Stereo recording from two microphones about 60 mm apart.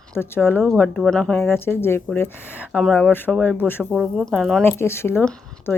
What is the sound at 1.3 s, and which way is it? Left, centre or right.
Speech, left.